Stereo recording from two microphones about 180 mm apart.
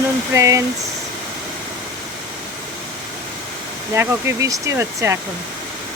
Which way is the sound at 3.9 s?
20° right (ahead or behind).